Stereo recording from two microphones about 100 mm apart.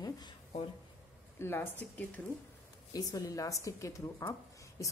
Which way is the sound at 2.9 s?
40° left (ahead or behind).